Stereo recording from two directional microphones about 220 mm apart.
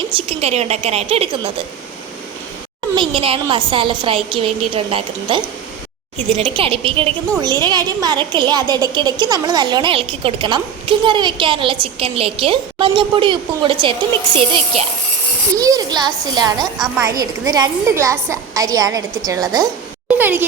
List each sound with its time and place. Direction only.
0.1 s a woman's voice: 25° right (ahead or behind)
2.9 s a woman's voice: 25° right (ahead or behind)